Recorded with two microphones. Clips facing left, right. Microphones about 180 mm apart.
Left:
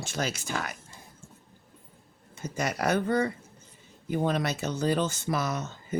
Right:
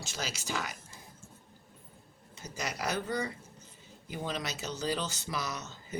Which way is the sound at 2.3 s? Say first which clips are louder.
Left 7 dB; 55° left (ahead or behind).